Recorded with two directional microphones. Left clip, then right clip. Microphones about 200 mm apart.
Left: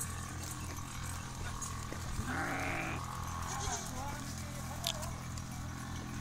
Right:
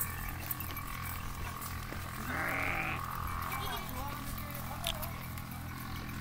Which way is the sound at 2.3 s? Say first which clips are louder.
Right 3 dB; 45° left (ahead or behind).